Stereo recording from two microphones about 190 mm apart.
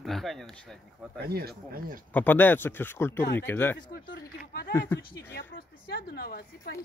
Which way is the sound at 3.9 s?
70° left (ahead or behind).